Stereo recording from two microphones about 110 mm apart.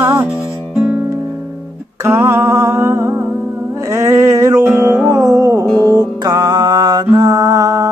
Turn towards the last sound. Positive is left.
turn(degrees=-30)  # may be behind; listen again after turning